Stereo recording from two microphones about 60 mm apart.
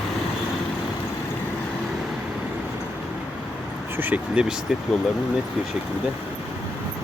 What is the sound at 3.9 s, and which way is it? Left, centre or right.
Speech, right.